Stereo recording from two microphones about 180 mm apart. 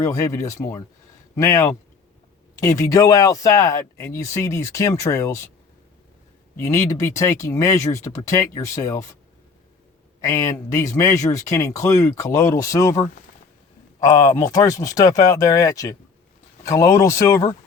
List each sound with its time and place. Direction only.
0.0 s speech: 20° left (ahead or behind)
6.6 s speech: 15° left (ahead or behind)
10.2 s speech: 20° left (ahead or behind)
14.0 s speech: 20° left (ahead or behind)